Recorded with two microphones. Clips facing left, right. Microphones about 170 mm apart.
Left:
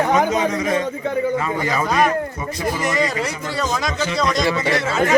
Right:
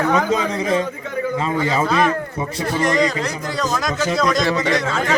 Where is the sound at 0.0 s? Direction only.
20° left (ahead or behind).